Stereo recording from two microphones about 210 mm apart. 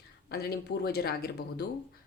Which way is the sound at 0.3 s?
50° left (ahead or behind).